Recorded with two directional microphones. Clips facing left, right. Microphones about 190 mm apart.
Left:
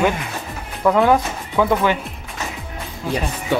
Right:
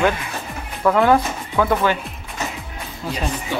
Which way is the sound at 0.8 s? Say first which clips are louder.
Even; 10° left (ahead or behind).